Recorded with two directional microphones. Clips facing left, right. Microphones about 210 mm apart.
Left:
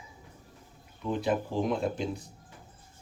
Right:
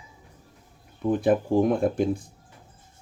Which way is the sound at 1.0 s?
50° right (ahead or behind).